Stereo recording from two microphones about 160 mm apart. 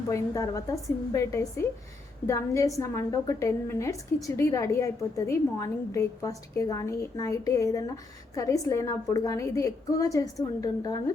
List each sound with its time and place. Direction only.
0.1 s a woman's voice: 20° left (ahead or behind)